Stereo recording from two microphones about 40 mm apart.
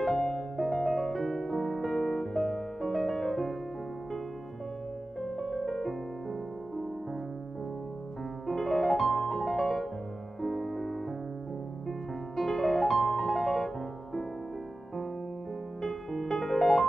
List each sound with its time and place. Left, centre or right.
0.0 s music: centre
5.2 s music: centre
8.5 s music: centre
12.4 s music: centre
15.8 s music: centre